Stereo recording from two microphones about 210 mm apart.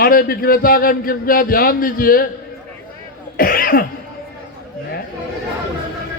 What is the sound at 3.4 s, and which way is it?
Cough, 45° left (ahead or behind).